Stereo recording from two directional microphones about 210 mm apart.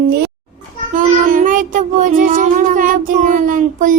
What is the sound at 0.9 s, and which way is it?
Child singing, 40° right (ahead or behind).